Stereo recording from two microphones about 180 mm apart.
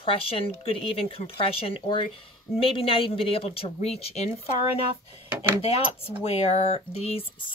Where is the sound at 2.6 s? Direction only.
30° left (ahead or behind).